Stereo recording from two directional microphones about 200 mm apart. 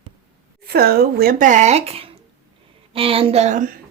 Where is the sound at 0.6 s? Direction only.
50° right (ahead or behind).